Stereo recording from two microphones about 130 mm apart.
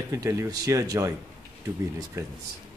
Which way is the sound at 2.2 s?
25° right (ahead or behind).